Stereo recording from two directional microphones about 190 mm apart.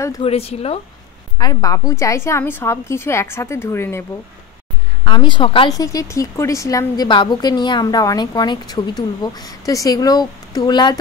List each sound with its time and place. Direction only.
0.2 s speech: 30° left (ahead or behind)
1.4 s a woman's voice: 20° left (ahead or behind)
5.0 s a woman's voice: 25° left (ahead or behind)